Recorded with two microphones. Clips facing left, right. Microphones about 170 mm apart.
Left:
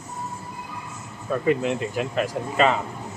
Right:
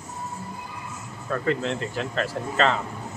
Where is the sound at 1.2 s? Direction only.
15° left (ahead or behind).